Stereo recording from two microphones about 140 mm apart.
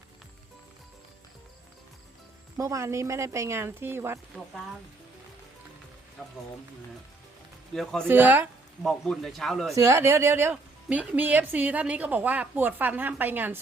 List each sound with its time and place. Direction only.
2.6 s speech: 20° right (ahead or behind)
7.7 s speech: centre (ahead or behind)
8.0 s a woman's voice: 15° right (ahead or behind)
8.8 s speech: centre (ahead or behind)
9.7 s a woman's voice: 20° right (ahead or behind)